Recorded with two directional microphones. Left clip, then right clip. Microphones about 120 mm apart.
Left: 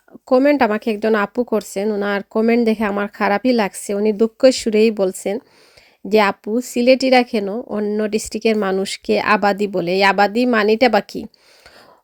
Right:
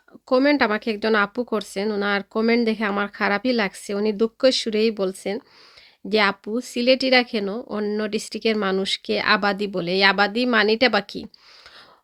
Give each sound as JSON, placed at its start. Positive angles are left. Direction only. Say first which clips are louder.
{"t": 0.3, "sound": "speech", "louder": "left 4 dB", "side_deg": 35}
{"t": 2.4, "sound": "speech", "louder": "left 5 dB", "side_deg": 30}
{"t": 2.6, "sound": "speech", "louder": "left 4 dB", "side_deg": 55}